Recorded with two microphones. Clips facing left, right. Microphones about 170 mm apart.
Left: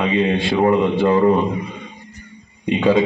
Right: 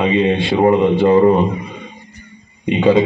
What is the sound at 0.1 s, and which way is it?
A man's voice, 20° right (ahead or behind).